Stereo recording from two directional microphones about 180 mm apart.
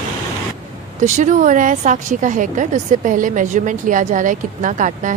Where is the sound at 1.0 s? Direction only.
45° right (ahead or behind).